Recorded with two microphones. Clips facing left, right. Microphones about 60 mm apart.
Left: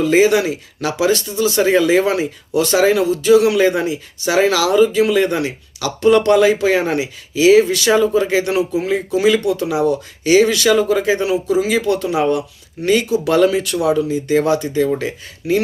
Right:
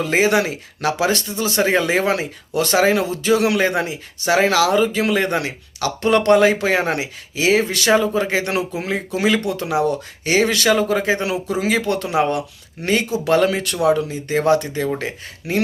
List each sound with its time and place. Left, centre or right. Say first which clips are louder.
0.0 s speech: left 4 dB; right
11.2 s speech: left 5 dB; right
12.8 s speech: left 4 dB; right